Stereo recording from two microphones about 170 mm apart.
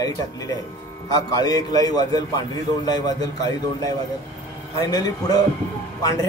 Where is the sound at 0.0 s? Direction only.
20° left (ahead or behind).